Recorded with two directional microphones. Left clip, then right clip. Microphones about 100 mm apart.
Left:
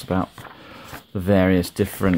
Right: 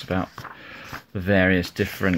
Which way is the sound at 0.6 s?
20° left (ahead or behind).